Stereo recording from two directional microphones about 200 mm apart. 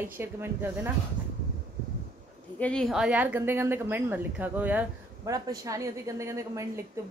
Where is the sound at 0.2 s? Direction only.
10° right (ahead or behind).